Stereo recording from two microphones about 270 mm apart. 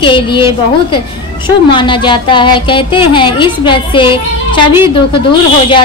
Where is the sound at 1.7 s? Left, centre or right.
Centre.